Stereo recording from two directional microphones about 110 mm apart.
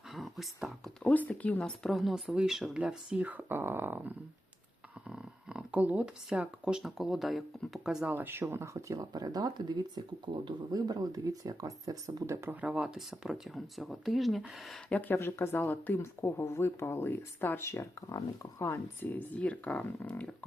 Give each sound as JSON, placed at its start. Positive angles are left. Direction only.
{"t": 0.1, "sound": "whispering", "side_deg": 0}
{"t": 1.0, "sound": "speech", "side_deg": 15}
{"t": 5.0, "sound": "a sound", "side_deg": -10}
{"t": 6.2, "sound": "speech", "side_deg": -10}
{"t": 8.1, "sound": "speech", "side_deg": -20}
{"t": 12.5, "sound": "speech", "side_deg": -10}
{"t": 14.8, "sound": "speech", "side_deg": 15}